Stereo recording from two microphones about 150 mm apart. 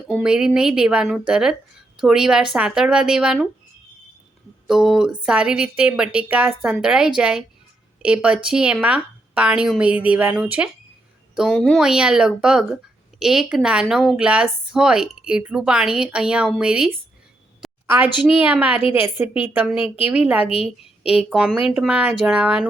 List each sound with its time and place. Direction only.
0.1 s a woman's voice: 5° right (ahead or behind)
4.6 s a woman's voice: 5° right (ahead or behind)
19.7 s a woman's voice: 40° left (ahead or behind)
20.1 s a woman's voice: 10° right (ahead or behind)
21.0 s a woman's voice: 40° left (ahead or behind)
21.2 s a woman's voice: 5° right (ahead or behind)